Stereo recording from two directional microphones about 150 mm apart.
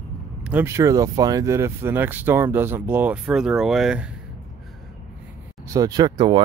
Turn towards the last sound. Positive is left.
turn(degrees=-30)  # may be behind; listen again after turning